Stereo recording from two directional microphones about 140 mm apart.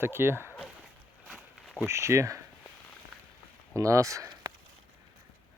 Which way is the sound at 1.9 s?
20° right (ahead or behind).